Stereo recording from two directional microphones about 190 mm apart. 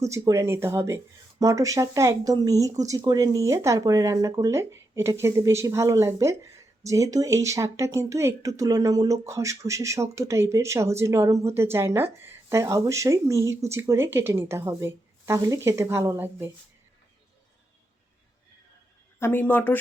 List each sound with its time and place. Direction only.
0.0 s speech: 15° right (ahead or behind)
19.2 s speech: 10° left (ahead or behind)